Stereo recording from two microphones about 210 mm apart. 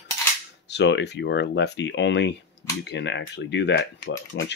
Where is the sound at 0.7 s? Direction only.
55° left (ahead or behind).